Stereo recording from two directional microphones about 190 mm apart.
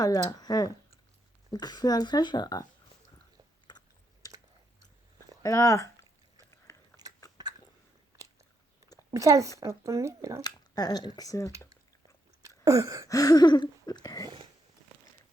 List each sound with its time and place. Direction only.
0.0 s speech: 20° left (ahead or behind)
3.7 s chewing: 20° left (ahead or behind)
5.4 s speech: 15° left (ahead or behind)
9.0 s a woman's voice: 15° right (ahead or behind)
10.4 s speech: 20° left (ahead or behind)
12.4 s a sound: 15° right (ahead or behind)
13.1 s speech: 20° left (ahead or behind)